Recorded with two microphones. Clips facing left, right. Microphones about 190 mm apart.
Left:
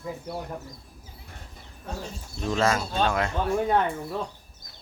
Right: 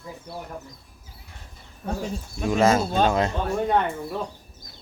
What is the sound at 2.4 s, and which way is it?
Speech, 10° right (ahead or behind).